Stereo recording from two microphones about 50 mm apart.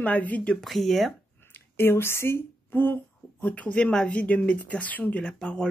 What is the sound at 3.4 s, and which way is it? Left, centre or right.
Speech, left.